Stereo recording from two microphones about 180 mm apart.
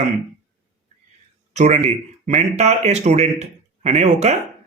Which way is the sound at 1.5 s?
40° right (ahead or behind).